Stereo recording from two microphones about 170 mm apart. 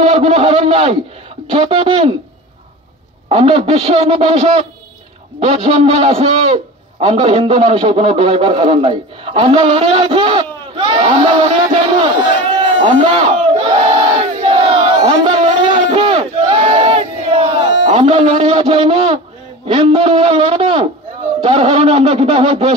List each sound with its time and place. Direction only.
0.1 s a man's voice: 35° right (ahead or behind)
3.3 s a man's voice: 30° right (ahead or behind)
15.9 s battle cry: 30° right (ahead or behind)
17.8 s a man's voice: 35° right (ahead or behind)